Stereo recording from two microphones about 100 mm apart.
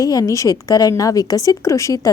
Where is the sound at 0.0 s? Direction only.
35° left (ahead or behind).